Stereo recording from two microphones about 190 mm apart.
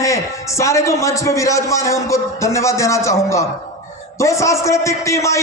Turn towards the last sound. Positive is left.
turn(degrees=15)  # may be behind; listen again after turning